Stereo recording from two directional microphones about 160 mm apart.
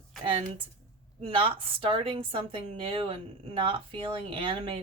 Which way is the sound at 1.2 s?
35° right (ahead or behind).